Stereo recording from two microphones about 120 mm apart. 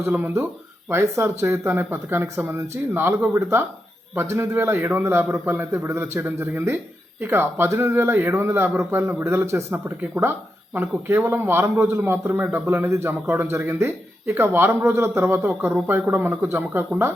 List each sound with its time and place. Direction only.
0.9 s a man's voice: 20° right (ahead or behind)